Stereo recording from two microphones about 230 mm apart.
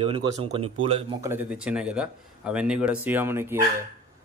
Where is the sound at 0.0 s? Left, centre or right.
Right.